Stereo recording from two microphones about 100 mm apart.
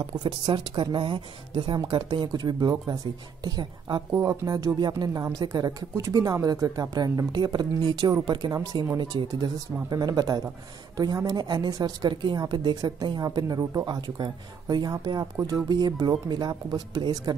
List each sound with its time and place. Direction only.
0.0 s a woman's voice: 50° right (ahead or behind)